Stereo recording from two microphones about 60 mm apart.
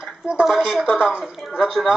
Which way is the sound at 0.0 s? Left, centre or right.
Centre.